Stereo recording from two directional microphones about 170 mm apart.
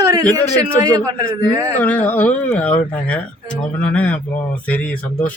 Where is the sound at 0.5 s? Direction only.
20° right (ahead or behind).